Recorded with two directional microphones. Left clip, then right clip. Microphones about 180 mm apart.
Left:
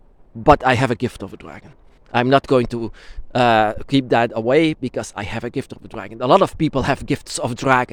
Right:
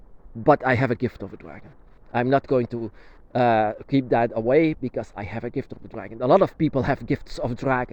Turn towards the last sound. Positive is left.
turn(degrees=30)  # may be behind; listen again after turning